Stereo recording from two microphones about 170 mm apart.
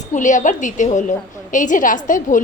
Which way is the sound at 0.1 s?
45° left (ahead or behind).